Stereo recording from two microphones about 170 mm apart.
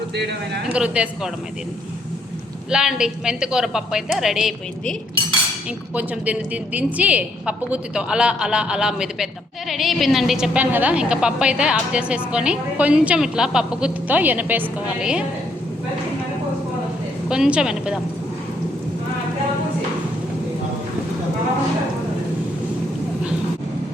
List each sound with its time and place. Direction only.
0.2 s speech: 85° right
0.7 s speech: 5° right (ahead or behind)
2.6 s a woman's voice: 5° right (ahead or behind)
17.2 s a woman's voice: 5° right (ahead or behind)